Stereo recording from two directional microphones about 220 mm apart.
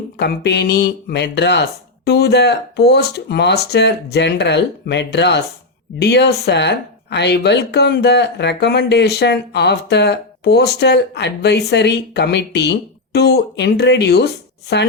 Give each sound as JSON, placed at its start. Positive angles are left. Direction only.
{"t": 0.2, "sound": "speech", "side_deg": 50}